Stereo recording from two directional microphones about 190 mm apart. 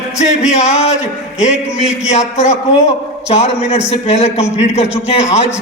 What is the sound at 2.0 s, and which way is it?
A man's voice, 35° left (ahead or behind).